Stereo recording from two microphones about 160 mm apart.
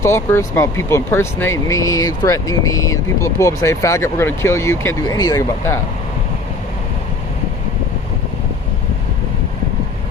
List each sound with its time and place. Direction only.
0.0 s speech: 15° left (ahead or behind)